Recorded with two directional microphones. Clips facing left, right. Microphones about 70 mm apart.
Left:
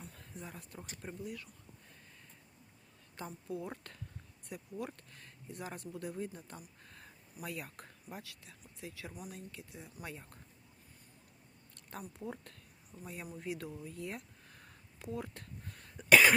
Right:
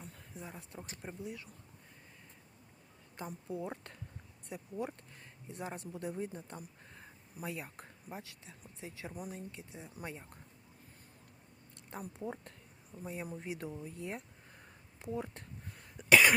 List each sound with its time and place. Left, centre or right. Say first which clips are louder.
0.0 s speech: even; centre
3.2 s speech: right 1 dB; right
11.9 s speech: right 2 dB; centre
16.0 s cough: left 1 dB; centre